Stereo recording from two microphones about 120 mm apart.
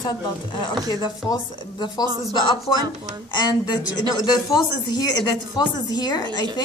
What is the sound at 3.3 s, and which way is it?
A woman's voice, 35° left (ahead or behind).